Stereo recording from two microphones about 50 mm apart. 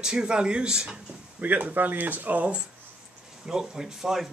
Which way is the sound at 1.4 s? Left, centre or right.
Right.